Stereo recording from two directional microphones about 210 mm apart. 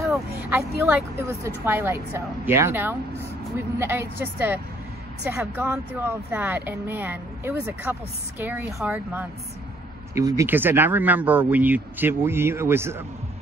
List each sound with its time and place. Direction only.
0.4 s speech: 10° right (ahead or behind)